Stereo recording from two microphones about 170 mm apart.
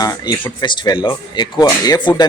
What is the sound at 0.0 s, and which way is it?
Speech, 20° left (ahead or behind).